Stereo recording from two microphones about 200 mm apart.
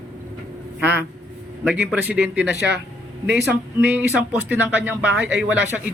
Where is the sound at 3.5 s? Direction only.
10° right (ahead or behind).